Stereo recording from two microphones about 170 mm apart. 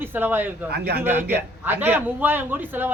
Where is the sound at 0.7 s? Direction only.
70° right (ahead or behind).